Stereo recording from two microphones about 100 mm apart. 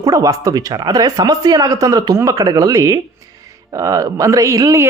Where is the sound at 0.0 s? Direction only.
35° right (ahead or behind).